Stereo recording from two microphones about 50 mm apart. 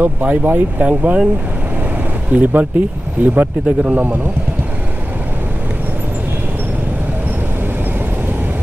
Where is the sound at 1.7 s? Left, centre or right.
Right.